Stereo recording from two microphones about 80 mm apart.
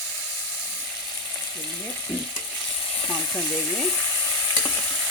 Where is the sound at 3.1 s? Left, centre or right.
Centre.